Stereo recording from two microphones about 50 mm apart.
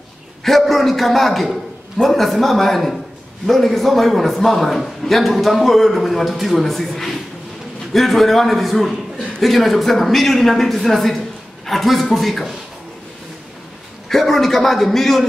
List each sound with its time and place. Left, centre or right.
0.4 s a man's voice: centre
14.0 s a man's voice: centre